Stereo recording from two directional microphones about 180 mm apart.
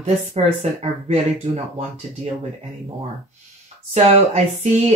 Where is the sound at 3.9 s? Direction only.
35° right (ahead or behind).